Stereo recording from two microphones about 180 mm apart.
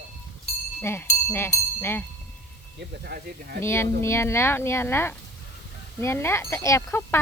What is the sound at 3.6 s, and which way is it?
Speech, 15° left (ahead or behind).